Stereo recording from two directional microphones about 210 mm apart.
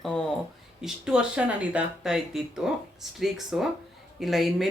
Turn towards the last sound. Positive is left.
turn(degrees=0)  # may be behind; listen again after turning